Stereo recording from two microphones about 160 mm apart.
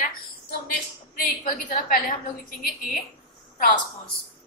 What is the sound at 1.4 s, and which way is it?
Speech, 55° left (ahead or behind).